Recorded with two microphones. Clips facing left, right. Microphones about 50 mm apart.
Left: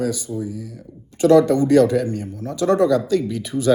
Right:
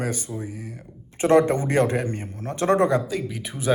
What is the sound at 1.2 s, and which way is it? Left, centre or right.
Speech, right.